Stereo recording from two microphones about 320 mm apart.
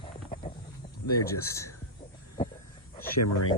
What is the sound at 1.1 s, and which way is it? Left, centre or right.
Speech, centre.